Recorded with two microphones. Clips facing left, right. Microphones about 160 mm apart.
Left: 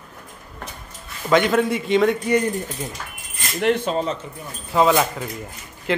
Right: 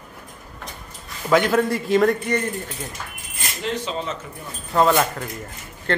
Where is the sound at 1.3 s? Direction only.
Centre (ahead or behind).